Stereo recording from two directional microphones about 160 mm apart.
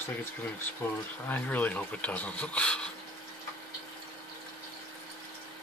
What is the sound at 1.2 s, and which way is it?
Speech, 10° left (ahead or behind).